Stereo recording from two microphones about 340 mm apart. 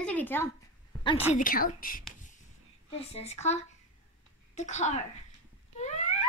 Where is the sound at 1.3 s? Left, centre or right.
Left.